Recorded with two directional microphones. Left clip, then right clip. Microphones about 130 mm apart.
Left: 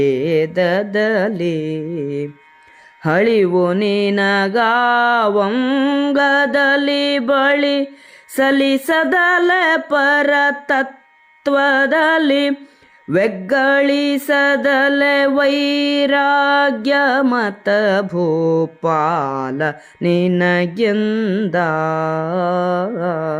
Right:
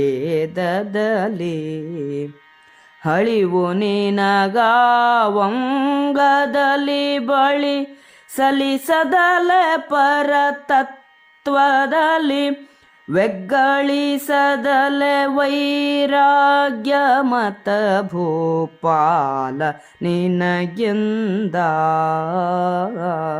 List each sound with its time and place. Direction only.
0.0 s music: 20° left (ahead or behind)